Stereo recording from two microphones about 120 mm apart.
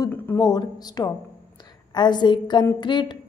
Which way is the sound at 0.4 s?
35° left (ahead or behind).